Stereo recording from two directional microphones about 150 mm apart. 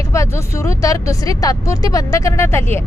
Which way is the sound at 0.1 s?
20° left (ahead or behind).